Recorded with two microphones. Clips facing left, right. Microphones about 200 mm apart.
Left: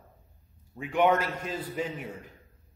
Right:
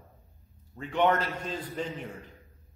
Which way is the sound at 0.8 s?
10° left (ahead or behind).